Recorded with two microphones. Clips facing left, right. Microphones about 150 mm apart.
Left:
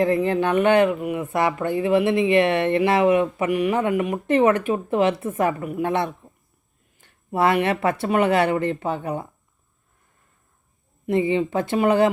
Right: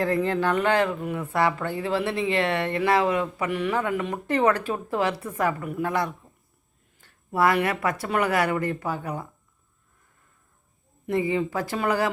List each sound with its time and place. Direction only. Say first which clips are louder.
0.0 s speech: left 4 dB; 20° left (ahead or behind)
11.0 s speech: left 4 dB; 25° left (ahead or behind)